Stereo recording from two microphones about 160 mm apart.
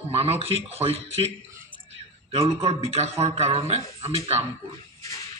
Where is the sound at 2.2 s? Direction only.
40° right (ahead or behind).